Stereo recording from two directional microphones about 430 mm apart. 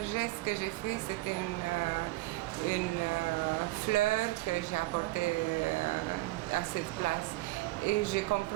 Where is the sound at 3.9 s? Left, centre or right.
Left.